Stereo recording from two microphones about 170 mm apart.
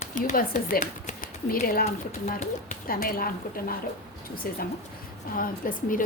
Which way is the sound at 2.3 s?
50° left (ahead or behind).